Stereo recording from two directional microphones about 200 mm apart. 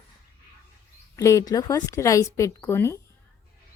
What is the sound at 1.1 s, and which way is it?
Speech, 15° left (ahead or behind).